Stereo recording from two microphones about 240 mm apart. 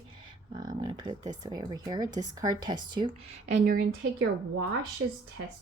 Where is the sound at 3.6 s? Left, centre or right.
Right.